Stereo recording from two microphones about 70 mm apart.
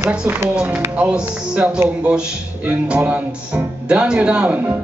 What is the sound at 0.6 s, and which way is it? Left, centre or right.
Speech, centre.